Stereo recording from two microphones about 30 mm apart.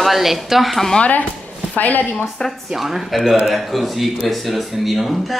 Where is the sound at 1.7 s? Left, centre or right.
Left.